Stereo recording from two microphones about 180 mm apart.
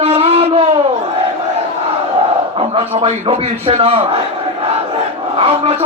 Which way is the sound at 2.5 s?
30° right (ahead or behind).